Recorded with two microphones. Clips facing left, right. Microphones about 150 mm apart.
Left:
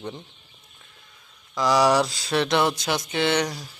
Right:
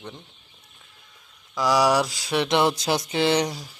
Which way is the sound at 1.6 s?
5° right (ahead or behind).